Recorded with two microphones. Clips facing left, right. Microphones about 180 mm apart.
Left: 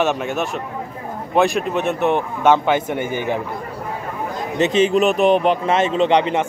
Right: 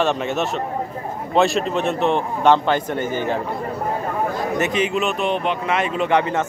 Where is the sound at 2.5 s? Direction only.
15° left (ahead or behind).